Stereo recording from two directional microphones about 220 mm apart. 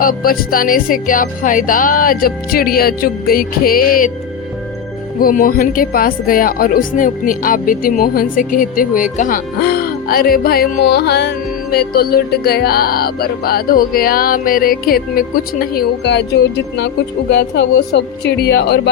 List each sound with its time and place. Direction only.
0.0 s speech: 40° left (ahead or behind)
5.2 s speech: 40° left (ahead or behind)
9.1 s music: 35° left (ahead or behind)